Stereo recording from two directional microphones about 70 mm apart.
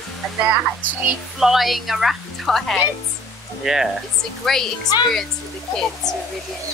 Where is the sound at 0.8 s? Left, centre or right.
Right.